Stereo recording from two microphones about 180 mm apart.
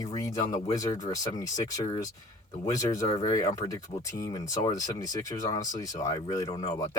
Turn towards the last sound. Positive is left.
turn(degrees=20)  # may be behind; listen again after turning